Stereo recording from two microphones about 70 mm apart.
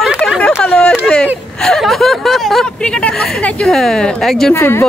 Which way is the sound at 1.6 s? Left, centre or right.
Centre.